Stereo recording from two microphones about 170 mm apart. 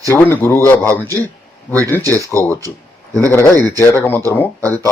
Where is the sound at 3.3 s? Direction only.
15° left (ahead or behind).